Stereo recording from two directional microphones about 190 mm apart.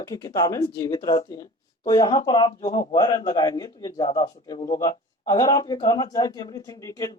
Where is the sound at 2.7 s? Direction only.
40° left (ahead or behind).